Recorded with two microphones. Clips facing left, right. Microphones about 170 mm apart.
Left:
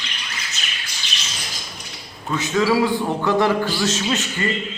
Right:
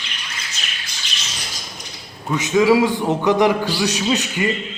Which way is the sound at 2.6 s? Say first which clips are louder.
Right 4 dB; 15° right (ahead or behind).